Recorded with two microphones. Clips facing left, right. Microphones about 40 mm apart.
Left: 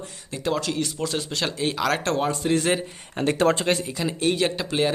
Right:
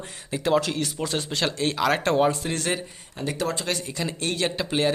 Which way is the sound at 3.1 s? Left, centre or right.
Left.